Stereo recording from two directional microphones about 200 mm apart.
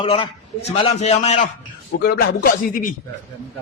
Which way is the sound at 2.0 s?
50° left (ahead or behind).